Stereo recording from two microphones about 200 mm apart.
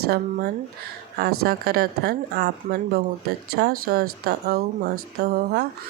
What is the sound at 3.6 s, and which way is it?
Speech, 50° right (ahead or behind).